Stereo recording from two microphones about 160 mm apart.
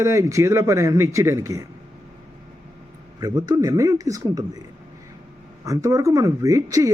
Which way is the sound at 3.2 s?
25° right (ahead or behind).